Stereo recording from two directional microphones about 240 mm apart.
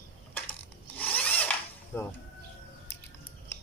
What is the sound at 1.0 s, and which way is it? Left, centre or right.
Drill, centre.